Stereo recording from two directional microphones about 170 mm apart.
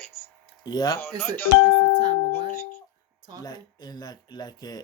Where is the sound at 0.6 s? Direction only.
20° left (ahead or behind).